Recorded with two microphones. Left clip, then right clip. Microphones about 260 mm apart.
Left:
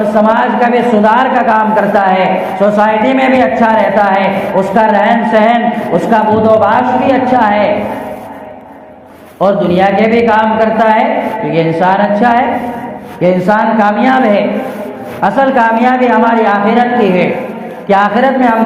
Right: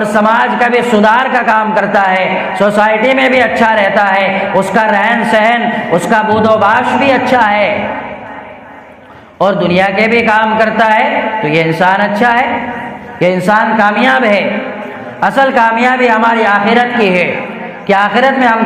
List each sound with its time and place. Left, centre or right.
0.3 s a man's voice: right
9.4 s a man's voice: right